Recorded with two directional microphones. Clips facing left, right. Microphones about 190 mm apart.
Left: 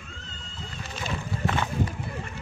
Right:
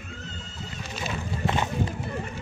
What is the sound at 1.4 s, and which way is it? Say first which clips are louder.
Run: right 1 dB; 20° right (ahead or behind).